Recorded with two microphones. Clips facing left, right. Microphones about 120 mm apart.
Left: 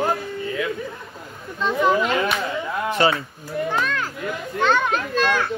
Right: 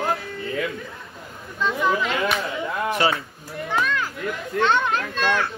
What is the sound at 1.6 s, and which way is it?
Speech, 25° left (ahead or behind).